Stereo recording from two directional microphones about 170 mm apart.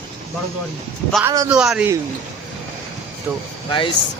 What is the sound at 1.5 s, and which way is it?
Speech, 5° right (ahead or behind).